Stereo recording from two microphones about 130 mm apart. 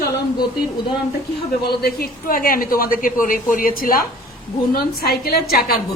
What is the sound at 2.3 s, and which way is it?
A woman's voice, 90° left.